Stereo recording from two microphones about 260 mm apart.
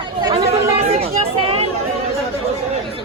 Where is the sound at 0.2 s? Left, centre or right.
Centre.